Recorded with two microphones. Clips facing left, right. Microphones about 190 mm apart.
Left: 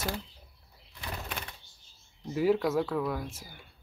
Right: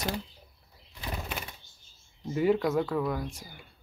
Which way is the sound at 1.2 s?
5° right (ahead or behind).